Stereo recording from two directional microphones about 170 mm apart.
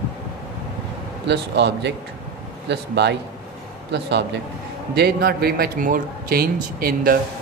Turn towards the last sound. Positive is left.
turn(degrees=-60)  # may be behind; listen again after turning